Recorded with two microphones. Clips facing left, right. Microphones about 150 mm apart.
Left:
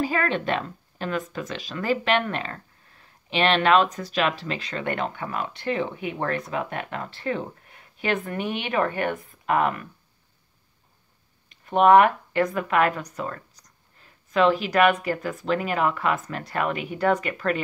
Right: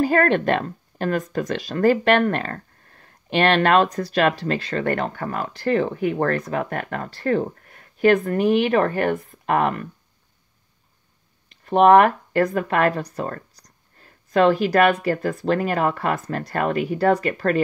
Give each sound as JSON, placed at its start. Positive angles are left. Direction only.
{"t": 0.0, "sound": "speech", "side_deg": -45}
{"t": 11.7, "sound": "speech", "side_deg": -40}